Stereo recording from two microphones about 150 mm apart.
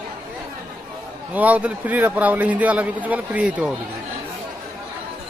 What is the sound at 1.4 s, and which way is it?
A man's voice, 10° right (ahead or behind).